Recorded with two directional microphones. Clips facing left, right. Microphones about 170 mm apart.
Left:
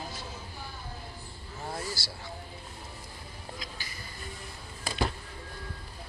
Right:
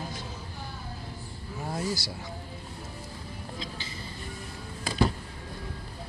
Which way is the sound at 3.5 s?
25° right (ahead or behind).